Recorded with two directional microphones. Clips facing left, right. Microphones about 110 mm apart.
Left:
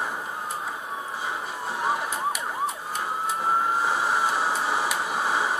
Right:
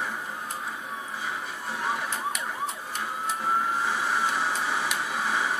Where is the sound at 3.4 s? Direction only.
30° left (ahead or behind).